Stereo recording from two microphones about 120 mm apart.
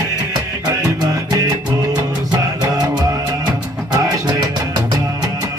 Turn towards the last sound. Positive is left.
turn(degrees=-35)  # may be behind; listen again after turning